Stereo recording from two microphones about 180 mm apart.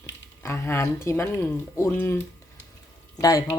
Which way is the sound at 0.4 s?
15° left (ahead or behind).